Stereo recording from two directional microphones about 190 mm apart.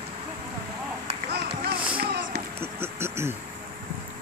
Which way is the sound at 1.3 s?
60° right (ahead or behind).